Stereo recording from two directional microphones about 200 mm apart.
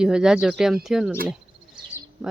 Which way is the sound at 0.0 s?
5° right (ahead or behind).